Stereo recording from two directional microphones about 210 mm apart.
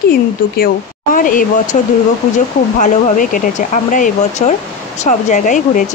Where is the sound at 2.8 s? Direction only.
40° left (ahead or behind).